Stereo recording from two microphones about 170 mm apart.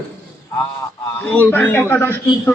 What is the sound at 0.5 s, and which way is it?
A man's voice, 15° left (ahead or behind).